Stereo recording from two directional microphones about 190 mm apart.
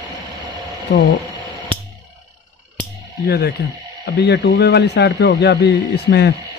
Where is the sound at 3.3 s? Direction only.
55° left (ahead or behind).